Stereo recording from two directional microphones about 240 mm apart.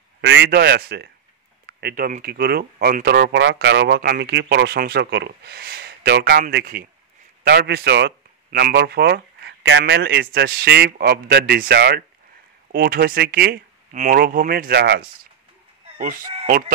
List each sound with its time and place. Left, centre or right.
0.2 s speech: right